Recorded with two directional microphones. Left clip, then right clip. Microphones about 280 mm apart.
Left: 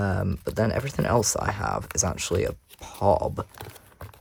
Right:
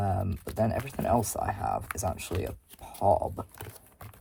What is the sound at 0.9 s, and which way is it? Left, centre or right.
Speech, left.